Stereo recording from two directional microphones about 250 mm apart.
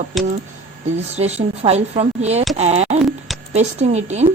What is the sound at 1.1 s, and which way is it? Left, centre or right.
A woman's voice, right.